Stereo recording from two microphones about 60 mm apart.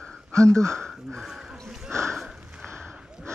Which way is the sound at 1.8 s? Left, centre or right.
Right.